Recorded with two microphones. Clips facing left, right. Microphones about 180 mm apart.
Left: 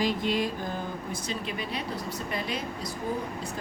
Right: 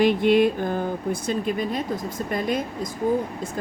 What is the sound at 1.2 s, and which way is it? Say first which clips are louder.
Speech: right 9 dB; 50° right (ahead or behind).